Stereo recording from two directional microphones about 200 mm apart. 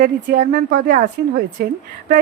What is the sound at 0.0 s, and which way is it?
Speech, 40° right (ahead or behind).